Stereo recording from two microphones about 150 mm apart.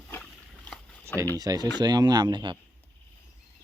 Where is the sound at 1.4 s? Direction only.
25° right (ahead or behind).